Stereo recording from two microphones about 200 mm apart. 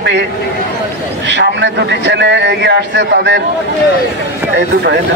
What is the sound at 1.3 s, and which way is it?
Speech, 60° right (ahead or behind).